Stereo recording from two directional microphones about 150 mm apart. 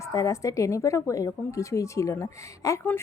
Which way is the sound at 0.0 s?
20° left (ahead or behind).